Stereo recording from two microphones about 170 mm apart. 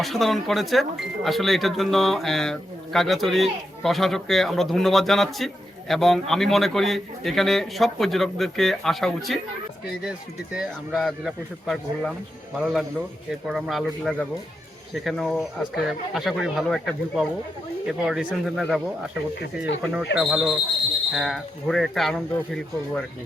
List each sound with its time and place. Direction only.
0.0 s speech: centre (ahead or behind)
13.5 s speech: centre (ahead or behind)
19.4 s speech: 85° left
20.1 s speech: 5° right (ahead or behind)